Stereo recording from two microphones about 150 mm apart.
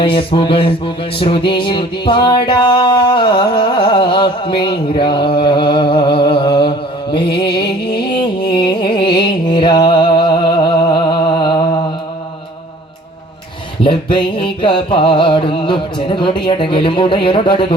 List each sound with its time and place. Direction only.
0.0 s music: 35° left (ahead or behind)
13.8 s music: 35° left (ahead or behind)